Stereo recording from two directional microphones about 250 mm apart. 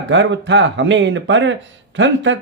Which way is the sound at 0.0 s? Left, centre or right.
Right.